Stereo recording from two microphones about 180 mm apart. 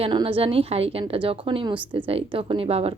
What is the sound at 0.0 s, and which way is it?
A woman's voice, 30° right (ahead or behind).